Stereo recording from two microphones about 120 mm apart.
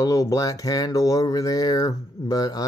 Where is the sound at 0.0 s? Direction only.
30° left (ahead or behind).